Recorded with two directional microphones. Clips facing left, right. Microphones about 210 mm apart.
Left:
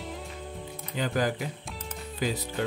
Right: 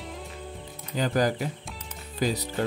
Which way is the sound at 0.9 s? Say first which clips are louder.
Right 3 dB; 40° right (ahead or behind).